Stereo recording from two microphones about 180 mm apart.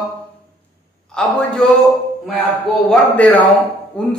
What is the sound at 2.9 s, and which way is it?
A man's voice, 5° left (ahead or behind).